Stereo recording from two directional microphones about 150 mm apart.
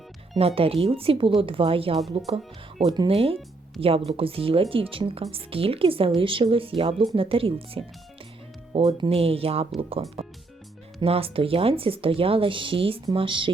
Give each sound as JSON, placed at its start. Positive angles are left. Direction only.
{"t": 0.3, "sound": "speech", "side_deg": -40}
{"t": 2.8, "sound": "speech", "side_deg": -30}
{"t": 3.1, "sound": "speech", "side_deg": -40}